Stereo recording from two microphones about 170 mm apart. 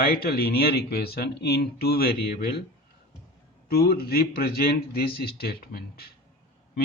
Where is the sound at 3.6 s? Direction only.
60° left (ahead or behind).